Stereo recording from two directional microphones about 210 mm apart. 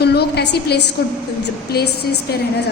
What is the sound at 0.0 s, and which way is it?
Speech, 50° left (ahead or behind).